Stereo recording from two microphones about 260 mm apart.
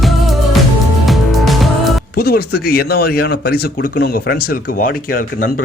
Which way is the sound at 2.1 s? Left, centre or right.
Left.